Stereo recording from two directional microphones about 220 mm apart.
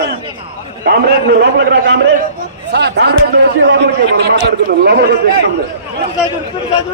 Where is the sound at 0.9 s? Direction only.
45° right (ahead or behind).